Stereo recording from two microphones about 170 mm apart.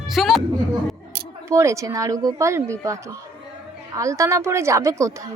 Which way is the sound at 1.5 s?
15° right (ahead or behind).